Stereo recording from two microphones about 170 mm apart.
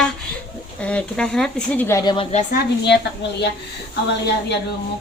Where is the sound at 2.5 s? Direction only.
85° left.